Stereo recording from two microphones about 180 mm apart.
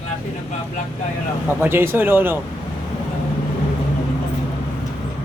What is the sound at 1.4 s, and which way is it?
Speech, 10° right (ahead or behind).